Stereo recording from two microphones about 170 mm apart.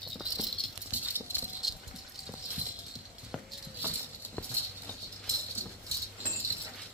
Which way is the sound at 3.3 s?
5° left (ahead or behind).